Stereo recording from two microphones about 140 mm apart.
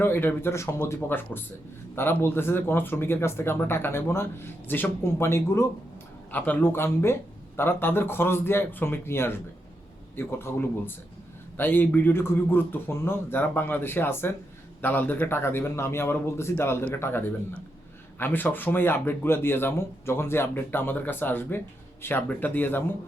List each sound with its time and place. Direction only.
0.0 s speech: 15° left (ahead or behind)